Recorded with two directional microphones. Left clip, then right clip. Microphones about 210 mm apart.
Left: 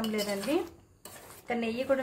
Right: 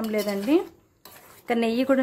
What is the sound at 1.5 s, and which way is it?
Speech, 55° right (ahead or behind).